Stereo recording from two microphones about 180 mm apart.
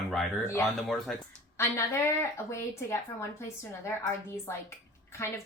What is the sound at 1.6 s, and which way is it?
A woman's voice, 15° left (ahead or behind).